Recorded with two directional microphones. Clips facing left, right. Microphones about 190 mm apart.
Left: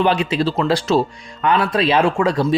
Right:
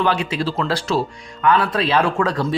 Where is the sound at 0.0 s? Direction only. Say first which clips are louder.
Left 3 dB; 20° left (ahead or behind).